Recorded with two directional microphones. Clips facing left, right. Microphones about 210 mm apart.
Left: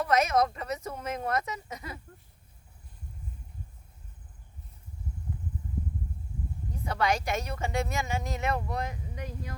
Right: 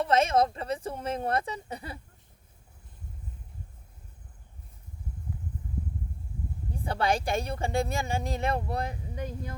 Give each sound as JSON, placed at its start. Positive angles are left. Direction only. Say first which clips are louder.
{"t": 0.0, "sound": "speech", "louder": "right 1 dB", "side_deg": -30}
{"t": 6.8, "sound": "speech", "louder": "right 1 dB", "side_deg": -30}